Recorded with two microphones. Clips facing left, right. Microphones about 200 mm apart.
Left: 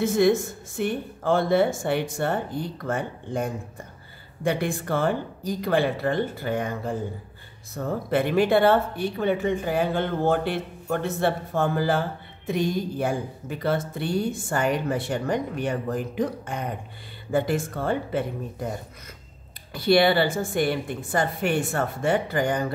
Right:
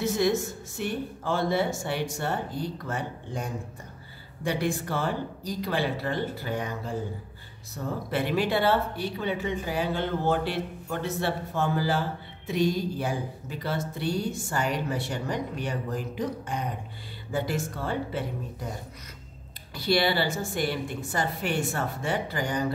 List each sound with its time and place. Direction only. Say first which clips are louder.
0.0 s speech: left 5 dB; 55° left (ahead or behind)
19.7 s speech: left 6 dB; 55° left (ahead or behind)